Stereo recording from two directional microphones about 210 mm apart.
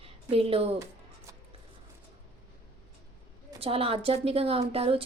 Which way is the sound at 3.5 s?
25° right (ahead or behind).